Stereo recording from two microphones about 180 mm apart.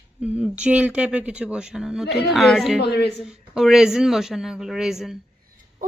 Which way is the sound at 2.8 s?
65° left (ahead or behind).